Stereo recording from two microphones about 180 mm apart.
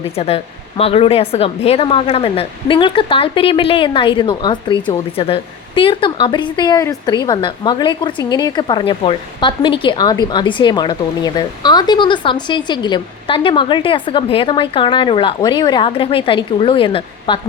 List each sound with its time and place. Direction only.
0.2 s a woman's voice: 35° left (ahead or behind)